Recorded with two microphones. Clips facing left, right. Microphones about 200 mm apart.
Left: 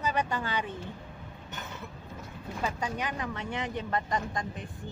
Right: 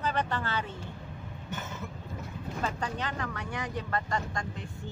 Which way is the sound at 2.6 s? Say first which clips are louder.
Left 2 dB; 10° left (ahead or behind).